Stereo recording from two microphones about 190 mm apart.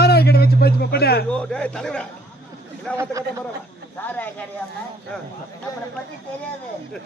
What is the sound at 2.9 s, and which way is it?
Speech, 15° right (ahead or behind).